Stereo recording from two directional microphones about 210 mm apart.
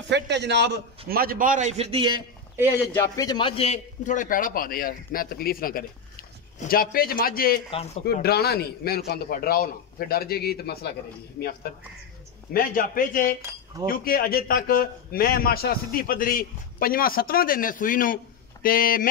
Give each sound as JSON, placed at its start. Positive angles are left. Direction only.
{"t": 0.1, "sound": "a man's voice", "side_deg": -55}
{"t": 2.9, "sound": "a man's voice", "side_deg": 15}
{"t": 7.7, "sound": "a man's voice", "side_deg": 30}
{"t": 8.0, "sound": "a man's voice", "side_deg": 50}
{"t": 12.5, "sound": "a man's voice", "side_deg": 40}